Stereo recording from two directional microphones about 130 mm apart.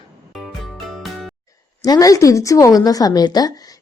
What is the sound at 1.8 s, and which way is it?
A woman's voice, 25° left (ahead or behind).